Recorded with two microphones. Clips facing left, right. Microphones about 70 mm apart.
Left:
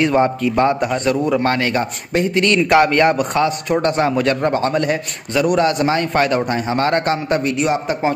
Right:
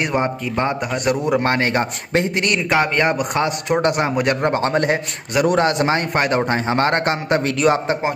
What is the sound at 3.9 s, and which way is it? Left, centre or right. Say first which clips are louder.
A man's voice: left 2 dB; centre.